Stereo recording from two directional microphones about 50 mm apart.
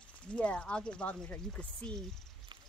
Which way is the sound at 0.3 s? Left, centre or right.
Left.